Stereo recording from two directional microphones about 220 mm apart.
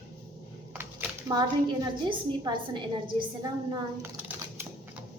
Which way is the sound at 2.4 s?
20° right (ahead or behind).